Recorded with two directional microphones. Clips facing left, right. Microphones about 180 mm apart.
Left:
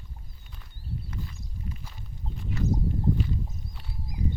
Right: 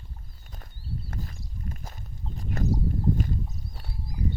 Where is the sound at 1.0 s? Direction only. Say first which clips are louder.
Right 1 dB; 45° right (ahead or behind).